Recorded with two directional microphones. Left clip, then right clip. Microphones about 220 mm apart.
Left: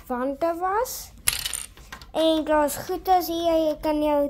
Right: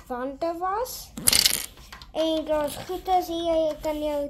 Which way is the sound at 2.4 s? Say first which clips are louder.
Left 4 dB; 35° left (ahead or behind).